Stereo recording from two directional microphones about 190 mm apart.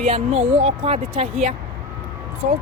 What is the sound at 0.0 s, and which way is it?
Speech, 30° right (ahead or behind).